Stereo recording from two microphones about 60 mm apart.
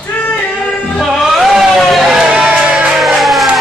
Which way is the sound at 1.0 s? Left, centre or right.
Centre.